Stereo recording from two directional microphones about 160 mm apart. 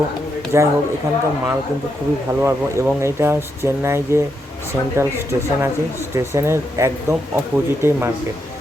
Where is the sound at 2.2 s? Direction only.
15° right (ahead or behind).